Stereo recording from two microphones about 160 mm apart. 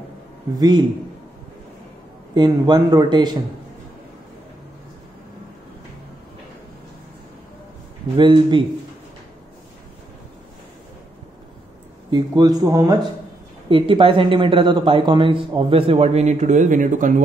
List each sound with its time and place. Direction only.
0.6 s speech: 25° right (ahead or behind)
2.3 s speech: 25° right (ahead or behind)
8.2 s speech: 30° right (ahead or behind)
12.1 s speech: 25° right (ahead or behind)
13.7 s speech: 35° right (ahead or behind); by 17.2 s 55° right (ahead or behind)